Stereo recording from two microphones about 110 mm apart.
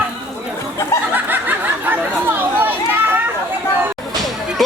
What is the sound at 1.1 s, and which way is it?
Snicker, 15° right (ahead or behind).